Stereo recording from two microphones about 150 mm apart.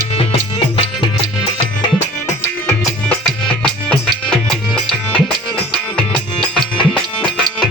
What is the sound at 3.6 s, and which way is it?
Music, 5° left (ahead or behind).